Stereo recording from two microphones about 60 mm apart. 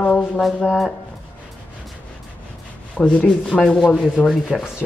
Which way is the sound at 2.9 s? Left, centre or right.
Left.